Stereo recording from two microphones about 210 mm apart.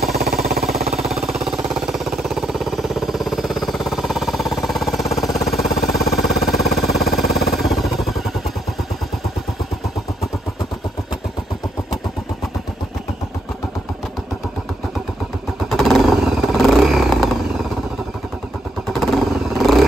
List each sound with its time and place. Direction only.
0.2 s vehicle: 45° right (ahead or behind)
0.7 s jackhammer: centre (ahead or behind)
4.6 s a sound: centre (ahead or behind)
15.7 s vehicle: centre (ahead or behind)
18.9 s vehicle: centre (ahead or behind)